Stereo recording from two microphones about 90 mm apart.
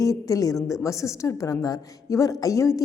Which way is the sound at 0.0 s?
40° left (ahead or behind).